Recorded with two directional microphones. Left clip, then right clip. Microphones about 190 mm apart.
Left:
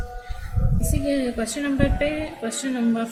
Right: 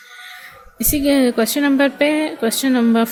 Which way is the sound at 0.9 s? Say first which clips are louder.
Right 9 dB; 55° right (ahead or behind).